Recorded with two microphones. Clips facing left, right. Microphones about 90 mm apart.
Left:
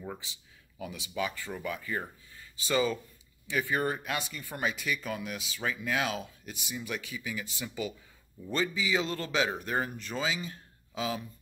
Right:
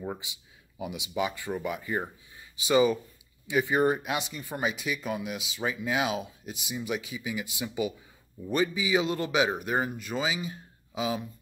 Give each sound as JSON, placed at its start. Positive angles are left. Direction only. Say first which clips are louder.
{"t": 0.0, "sound": "speech", "louder": "right 5 dB", "side_deg": -20}